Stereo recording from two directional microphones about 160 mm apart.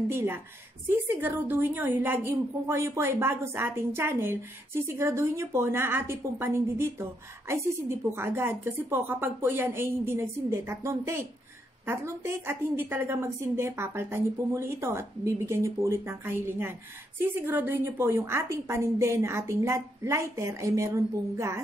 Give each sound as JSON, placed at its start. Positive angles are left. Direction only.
{"t": 0.1, "sound": "a woman's voice", "side_deg": -15}